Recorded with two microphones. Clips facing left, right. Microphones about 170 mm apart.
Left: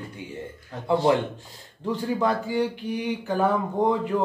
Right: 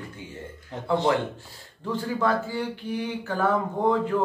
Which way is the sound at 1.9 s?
15° left (ahead or behind).